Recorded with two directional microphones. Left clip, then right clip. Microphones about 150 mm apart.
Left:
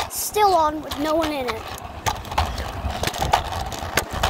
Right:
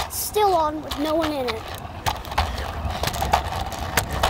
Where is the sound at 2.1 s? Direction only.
45° left (ahead or behind).